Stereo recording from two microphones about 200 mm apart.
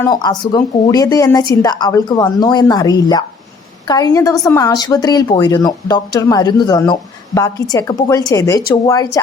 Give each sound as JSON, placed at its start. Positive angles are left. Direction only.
{"t": 0.0, "sound": "a woman's voice", "side_deg": 20}